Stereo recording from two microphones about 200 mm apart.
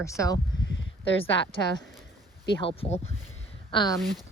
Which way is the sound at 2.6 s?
30° left (ahead or behind).